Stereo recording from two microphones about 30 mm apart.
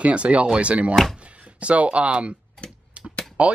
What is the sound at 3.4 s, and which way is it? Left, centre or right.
Speech, right.